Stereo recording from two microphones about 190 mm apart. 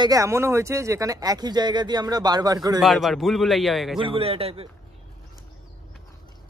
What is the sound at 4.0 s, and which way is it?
Speech, 30° right (ahead or behind).